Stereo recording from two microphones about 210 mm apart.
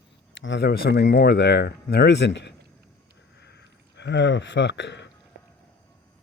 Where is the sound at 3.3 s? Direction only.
55° left (ahead or behind).